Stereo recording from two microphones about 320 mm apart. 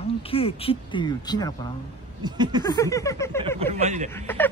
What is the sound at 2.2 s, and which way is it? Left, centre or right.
Speech, centre.